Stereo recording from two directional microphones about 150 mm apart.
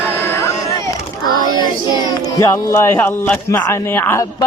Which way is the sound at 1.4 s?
30° left (ahead or behind).